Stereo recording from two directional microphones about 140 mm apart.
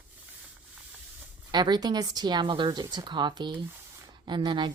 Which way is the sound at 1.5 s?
30° right (ahead or behind).